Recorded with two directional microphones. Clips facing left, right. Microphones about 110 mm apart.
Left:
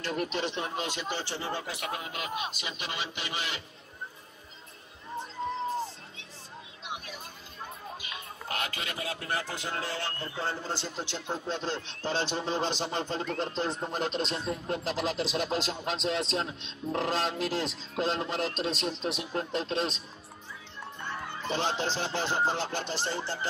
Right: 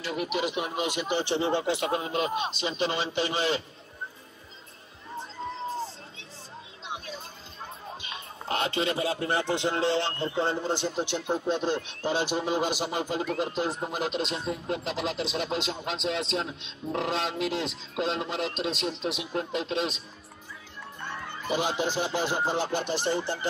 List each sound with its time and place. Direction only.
0.0 s speech: 5° right (ahead or behind); by 3.6 s 30° right (ahead or behind)
6.8 s music: 30° right (ahead or behind)
8.0 s speech: 30° right (ahead or behind); by 20.0 s centre (ahead or behind)
21.5 s speech: 10° right (ahead or behind)